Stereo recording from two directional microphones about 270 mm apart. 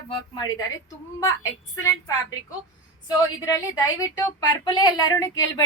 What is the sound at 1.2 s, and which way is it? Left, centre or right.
Speech, centre.